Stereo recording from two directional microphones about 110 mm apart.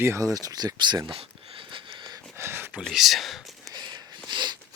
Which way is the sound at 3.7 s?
45° right (ahead or behind).